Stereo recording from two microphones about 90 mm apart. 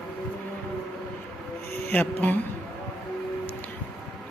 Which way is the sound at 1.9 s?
20° left (ahead or behind).